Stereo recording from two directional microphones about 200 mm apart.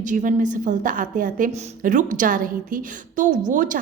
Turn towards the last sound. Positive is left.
turn(degrees=-40)  # may be behind; listen again after turning